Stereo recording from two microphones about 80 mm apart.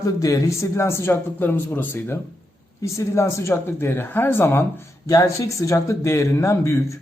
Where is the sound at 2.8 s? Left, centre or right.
Left.